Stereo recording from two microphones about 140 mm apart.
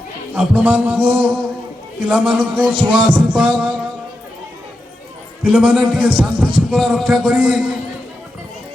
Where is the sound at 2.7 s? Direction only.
40° right (ahead or behind).